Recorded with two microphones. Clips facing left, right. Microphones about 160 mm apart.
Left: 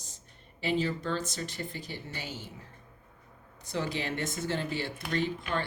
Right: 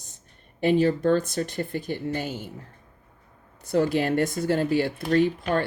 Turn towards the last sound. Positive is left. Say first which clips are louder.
# right 10 dB
turn(degrees=-45)  # may be behind; listen again after turning